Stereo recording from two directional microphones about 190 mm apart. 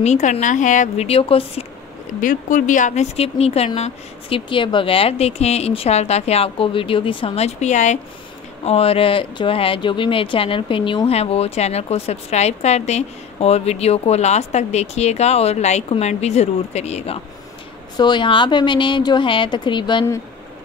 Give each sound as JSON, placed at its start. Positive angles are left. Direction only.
{"t": 0.0, "sound": "speech", "side_deg": 35}
{"t": 2.1, "sound": "speech", "side_deg": 45}
{"t": 17.9, "sound": "speech", "side_deg": 25}